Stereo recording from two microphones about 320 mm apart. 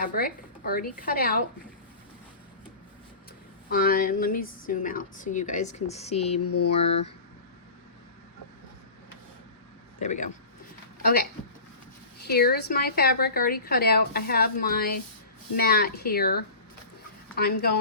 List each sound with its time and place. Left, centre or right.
0.0 s a woman's voice: left
3.7 s a woman's voice: left
6.4 s mantra: left
6.7 s a woman's voice: centre
10.0 s a woman's voice: left
12.2 s a woman's voice: left